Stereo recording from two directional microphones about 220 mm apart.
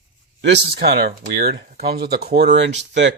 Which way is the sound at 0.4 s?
50° right (ahead or behind).